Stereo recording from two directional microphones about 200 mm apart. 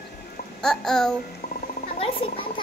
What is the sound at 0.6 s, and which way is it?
Child singing, centre (ahead or behind).